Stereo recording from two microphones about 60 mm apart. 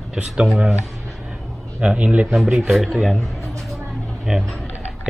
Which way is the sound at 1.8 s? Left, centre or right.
Centre.